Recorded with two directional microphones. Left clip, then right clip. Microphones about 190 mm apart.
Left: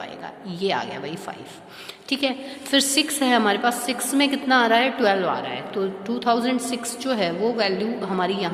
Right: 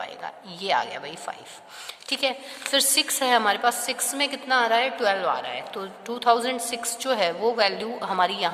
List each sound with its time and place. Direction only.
0.6 s a woman's voice: 30° right (ahead or behind)